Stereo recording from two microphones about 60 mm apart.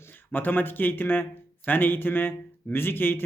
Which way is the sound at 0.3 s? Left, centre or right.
Left.